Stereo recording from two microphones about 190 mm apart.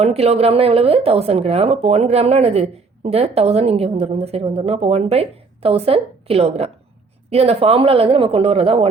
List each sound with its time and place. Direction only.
0.0 s speech: 35° right (ahead or behind)